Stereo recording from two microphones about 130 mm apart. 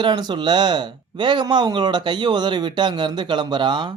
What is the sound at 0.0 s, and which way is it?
Speech, 35° right (ahead or behind).